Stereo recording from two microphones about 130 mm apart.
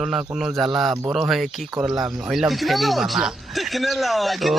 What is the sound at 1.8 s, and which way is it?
Speech, 30° right (ahead or behind).